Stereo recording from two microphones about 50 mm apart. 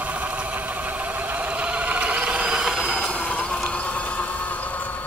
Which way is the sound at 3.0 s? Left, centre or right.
Centre.